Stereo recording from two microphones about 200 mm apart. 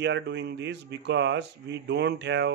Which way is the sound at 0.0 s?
60° right (ahead or behind).